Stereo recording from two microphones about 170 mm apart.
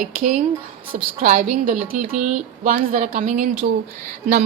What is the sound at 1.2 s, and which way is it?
A woman's voice, 50° right (ahead or behind).